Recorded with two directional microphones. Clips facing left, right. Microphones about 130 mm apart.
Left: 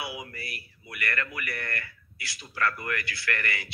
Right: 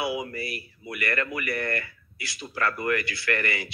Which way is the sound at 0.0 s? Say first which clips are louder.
Right 8 dB; 25° right (ahead or behind).